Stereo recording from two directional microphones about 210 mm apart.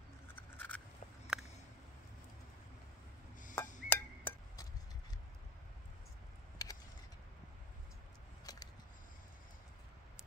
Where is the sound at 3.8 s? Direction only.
10° left (ahead or behind).